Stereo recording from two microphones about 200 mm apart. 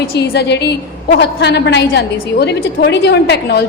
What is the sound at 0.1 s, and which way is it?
A woman's voice, 55° left (ahead or behind).